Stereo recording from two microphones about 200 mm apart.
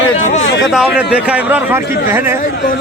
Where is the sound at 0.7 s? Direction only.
5° right (ahead or behind).